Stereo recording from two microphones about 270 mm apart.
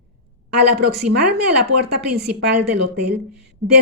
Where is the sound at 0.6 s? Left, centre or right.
Right.